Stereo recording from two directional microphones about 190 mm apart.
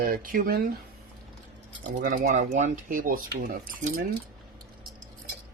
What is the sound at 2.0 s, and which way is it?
Speech, 45° right (ahead or behind).